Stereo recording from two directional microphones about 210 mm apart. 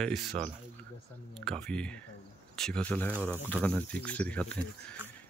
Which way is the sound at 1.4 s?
5° left (ahead or behind).